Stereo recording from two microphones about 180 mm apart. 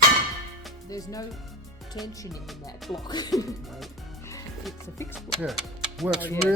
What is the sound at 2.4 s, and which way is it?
Speech, centre (ahead or behind).